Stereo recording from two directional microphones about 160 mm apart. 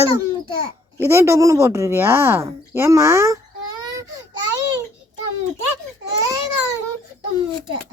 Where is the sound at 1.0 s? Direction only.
15° right (ahead or behind).